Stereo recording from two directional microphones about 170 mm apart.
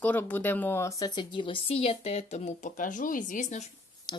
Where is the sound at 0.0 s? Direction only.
10° left (ahead or behind); by 3.7 s 45° left (ahead or behind).